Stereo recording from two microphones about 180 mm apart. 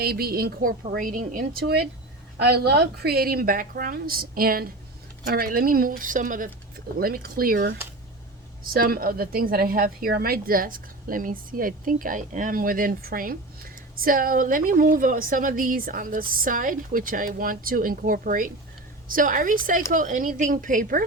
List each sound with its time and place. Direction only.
0.0 s a woman's voice: 60° right (ahead or behind)